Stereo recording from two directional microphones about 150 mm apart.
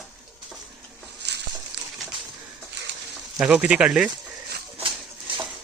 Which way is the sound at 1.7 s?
90° right.